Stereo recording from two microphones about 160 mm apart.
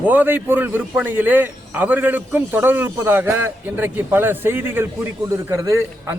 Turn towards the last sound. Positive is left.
turn(degrees=-20)  # may be behind; listen again after turning